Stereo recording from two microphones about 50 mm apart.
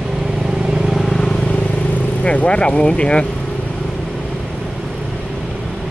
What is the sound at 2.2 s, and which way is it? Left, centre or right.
Speech, left.